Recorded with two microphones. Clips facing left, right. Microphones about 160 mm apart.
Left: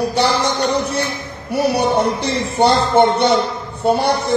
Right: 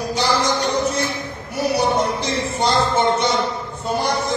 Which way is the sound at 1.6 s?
65° left (ahead or behind).